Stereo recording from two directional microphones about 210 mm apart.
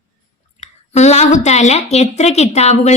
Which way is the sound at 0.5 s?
30° left (ahead or behind).